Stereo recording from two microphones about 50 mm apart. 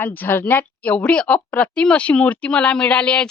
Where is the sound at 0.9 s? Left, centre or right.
Centre.